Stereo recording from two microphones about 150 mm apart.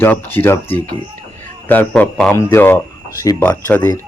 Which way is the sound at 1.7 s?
10° left (ahead or behind).